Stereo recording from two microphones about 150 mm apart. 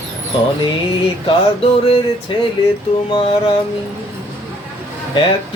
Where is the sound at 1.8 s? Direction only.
35° left (ahead or behind).